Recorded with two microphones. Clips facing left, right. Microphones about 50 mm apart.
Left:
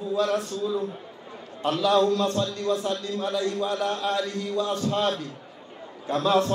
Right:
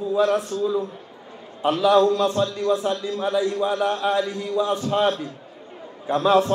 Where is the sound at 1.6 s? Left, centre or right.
Centre.